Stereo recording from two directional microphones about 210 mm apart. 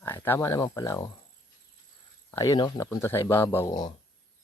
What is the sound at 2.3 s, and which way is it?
Speech, 15° left (ahead or behind).